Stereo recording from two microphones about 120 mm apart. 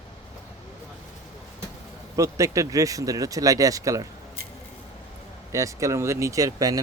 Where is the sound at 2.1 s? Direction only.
25° right (ahead or behind).